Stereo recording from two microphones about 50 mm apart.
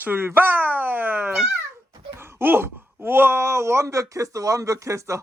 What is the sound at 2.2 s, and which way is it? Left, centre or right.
Wail, right.